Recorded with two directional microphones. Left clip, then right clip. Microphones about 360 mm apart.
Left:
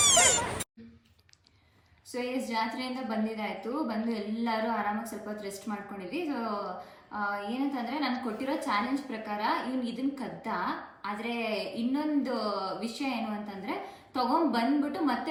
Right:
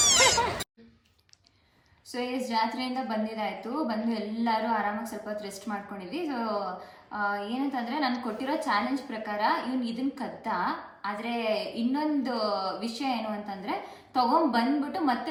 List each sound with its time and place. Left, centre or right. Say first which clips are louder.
2.1 s a woman's voice: right 3 dB; centre